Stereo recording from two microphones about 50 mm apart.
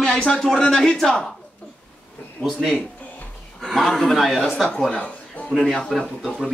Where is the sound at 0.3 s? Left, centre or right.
Centre.